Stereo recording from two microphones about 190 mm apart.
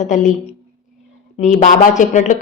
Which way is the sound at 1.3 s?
40° left (ahead or behind).